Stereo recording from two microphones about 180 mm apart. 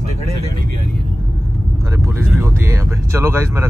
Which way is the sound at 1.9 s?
15° right (ahead or behind).